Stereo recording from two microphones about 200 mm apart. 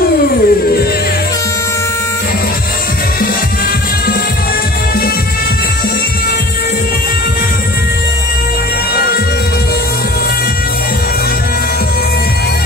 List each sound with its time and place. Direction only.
0.3 s music: 50° left (ahead or behind)